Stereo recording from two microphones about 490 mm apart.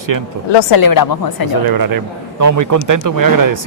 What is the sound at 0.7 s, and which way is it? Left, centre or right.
Speech, left.